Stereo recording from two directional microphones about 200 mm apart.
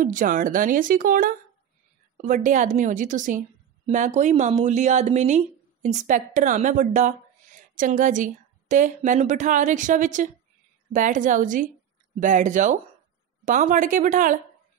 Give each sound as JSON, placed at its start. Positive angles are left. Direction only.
{"t": 0.0, "sound": "a woman's voice", "side_deg": -40}